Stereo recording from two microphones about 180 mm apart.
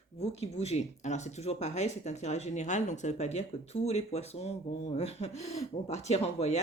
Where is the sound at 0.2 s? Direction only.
35° left (ahead or behind).